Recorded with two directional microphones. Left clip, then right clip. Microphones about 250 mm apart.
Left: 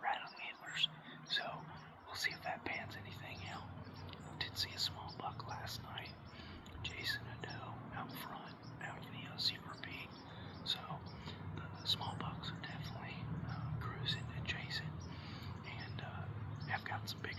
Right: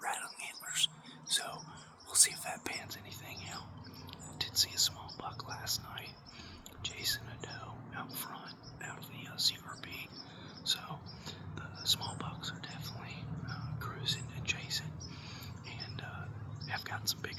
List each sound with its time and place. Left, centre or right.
0.0 s whispering: right
1.3 s a sound: right
2.1 s whispering: right
9.4 s whispering: right
16.6 s whispering: right